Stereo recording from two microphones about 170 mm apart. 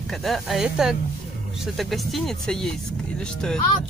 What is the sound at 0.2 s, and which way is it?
A woman's voice, centre (ahead or behind).